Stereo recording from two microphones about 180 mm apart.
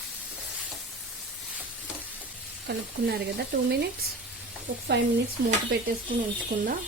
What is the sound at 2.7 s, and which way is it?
Speech, 65° right (ahead or behind).